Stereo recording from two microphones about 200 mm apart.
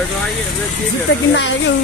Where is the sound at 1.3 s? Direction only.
65° left (ahead or behind).